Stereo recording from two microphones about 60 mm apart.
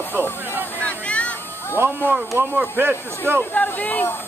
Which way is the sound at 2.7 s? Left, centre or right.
Right.